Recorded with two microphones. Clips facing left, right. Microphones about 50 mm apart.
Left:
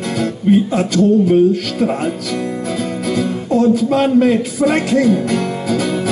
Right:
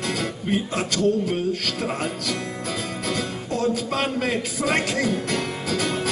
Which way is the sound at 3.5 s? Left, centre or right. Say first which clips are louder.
Left 11 dB; centre.